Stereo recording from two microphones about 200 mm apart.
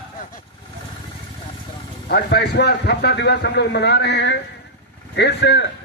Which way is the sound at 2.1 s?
55° left (ahead or behind).